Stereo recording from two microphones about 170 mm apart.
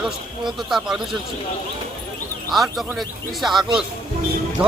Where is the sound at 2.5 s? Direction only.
Centre (ahead or behind).